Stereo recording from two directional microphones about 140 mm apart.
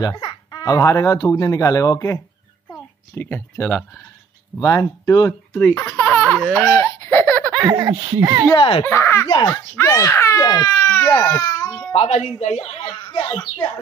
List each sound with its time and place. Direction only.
0.0 s speech: 30° left (ahead or behind)
3.2 s speech: 15° left (ahead or behind)
4.6 s speech: 25° left (ahead or behind)
5.5 s baby laughter: 10° left (ahead or behind)
8.2 s speech: 20° right (ahead or behind)
8.5 s a child's voice: 40° left (ahead or behind)
8.8 s speech: 15° left (ahead or behind)
11.2 s babbling: 20° left (ahead or behind)
11.9 s speech: 50° left (ahead or behind); by 13.7 s 30° left (ahead or behind)